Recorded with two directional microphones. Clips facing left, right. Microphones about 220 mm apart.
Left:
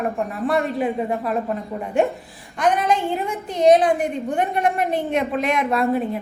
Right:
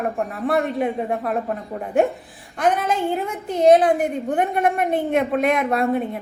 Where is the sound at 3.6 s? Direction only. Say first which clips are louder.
Right 1 dB; 55° right (ahead or behind).